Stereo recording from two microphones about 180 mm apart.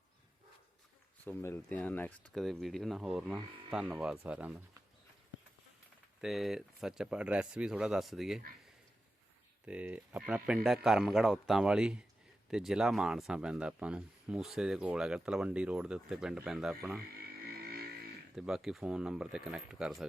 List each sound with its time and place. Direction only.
1.2 s speech: 10° left (ahead or behind); by 4.8 s 10° right (ahead or behind)
6.2 s speech: centre (ahead or behind)
9.6 s speech: 5° right (ahead or behind)
17.4 s vehicle: 60° right (ahead or behind)
18.3 s speech: 5° right (ahead or behind)